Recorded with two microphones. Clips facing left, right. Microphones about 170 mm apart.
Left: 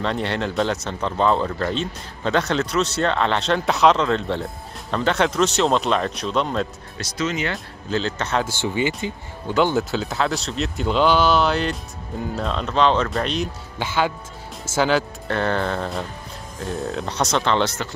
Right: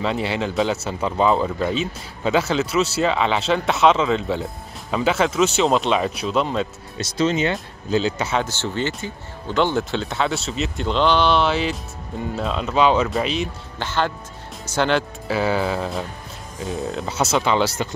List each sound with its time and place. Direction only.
0.0 s speech: 5° right (ahead or behind)
7.0 s speech: 30° right (ahead or behind)
8.0 s speech: 5° right (ahead or behind)
8.5 s speech: 10° left (ahead or behind)
13.7 s speech: 10° left (ahead or behind); by 17.8 s 10° right (ahead or behind)